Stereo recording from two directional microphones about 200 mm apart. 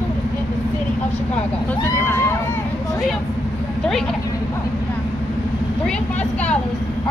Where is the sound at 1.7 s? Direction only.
10° left (ahead or behind).